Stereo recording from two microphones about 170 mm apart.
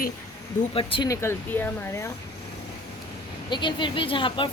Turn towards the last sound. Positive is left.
turn(degrees=30)  # may be behind; listen again after turning